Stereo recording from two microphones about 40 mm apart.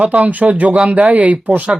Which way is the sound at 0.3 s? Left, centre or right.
Right.